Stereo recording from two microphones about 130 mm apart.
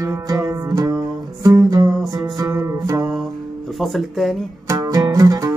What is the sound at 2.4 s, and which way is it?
Music, 30° right (ahead or behind).